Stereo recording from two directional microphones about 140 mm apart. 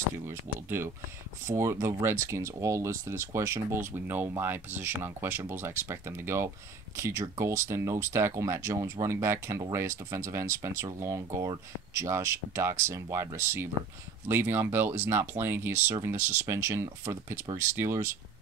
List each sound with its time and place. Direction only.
0.3 s speech: 15° right (ahead or behind)